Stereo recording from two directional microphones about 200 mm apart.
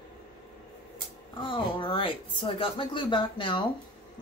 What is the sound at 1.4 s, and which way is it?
Speech, 25° left (ahead or behind).